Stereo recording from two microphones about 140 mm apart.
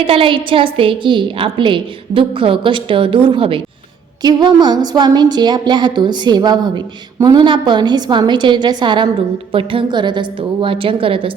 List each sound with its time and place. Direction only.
0.0 s a woman's voice: 40° right (ahead or behind)